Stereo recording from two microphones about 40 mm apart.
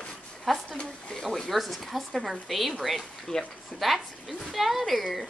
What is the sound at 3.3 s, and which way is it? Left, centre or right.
Speech, left.